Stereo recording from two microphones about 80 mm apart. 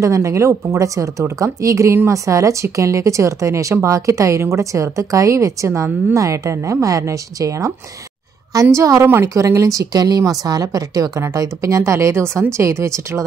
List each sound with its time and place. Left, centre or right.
0.0 s a woman's voice: right
8.7 s a woman's voice: right